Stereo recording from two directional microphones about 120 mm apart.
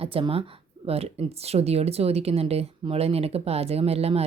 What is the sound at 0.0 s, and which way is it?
A woman's voice, 50° right (ahead or behind).